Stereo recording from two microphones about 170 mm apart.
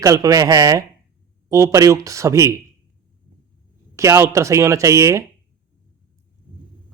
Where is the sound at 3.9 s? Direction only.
15° right (ahead or behind).